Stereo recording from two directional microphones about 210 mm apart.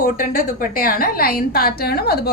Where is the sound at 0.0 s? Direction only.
40° left (ahead or behind).